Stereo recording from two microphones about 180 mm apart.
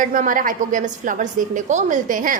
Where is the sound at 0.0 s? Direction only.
50° right (ahead or behind).